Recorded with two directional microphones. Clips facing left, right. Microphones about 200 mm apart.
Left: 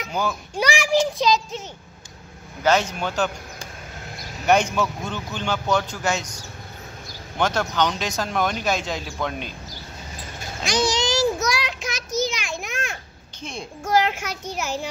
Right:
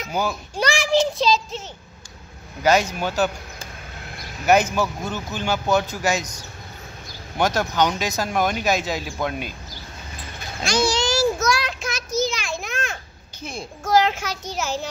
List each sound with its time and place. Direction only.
0.1 s a child's voice: 10° right (ahead or behind)
0.6 s a child's voice: 10° left (ahead or behind)
2.6 s speech: 10° right (ahead or behind)
7.3 s speech: 10° right (ahead or behind)
10.6 s child singing: 15° left (ahead or behind)
13.4 s a child's voice: 5° right (ahead or behind)
13.8 s a child's voice: 10° left (ahead or behind)